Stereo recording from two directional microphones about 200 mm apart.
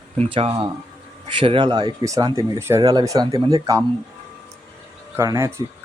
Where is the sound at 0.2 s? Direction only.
30° right (ahead or behind).